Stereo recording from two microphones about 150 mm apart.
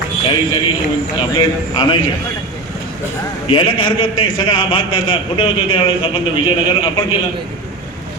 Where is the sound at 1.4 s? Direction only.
35° left (ahead or behind).